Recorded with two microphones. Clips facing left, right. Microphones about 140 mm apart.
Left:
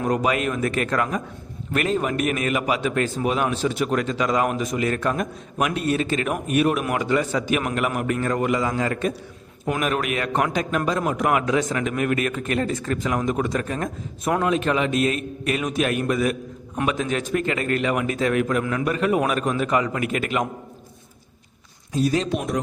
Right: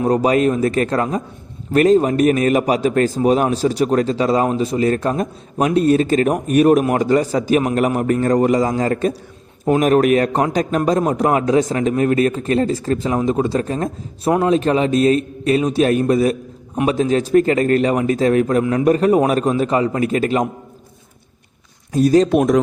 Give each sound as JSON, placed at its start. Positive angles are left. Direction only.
{"t": 0.0, "sound": "a man's voice", "side_deg": -35}
{"t": 21.9, "sound": "speech", "side_deg": -45}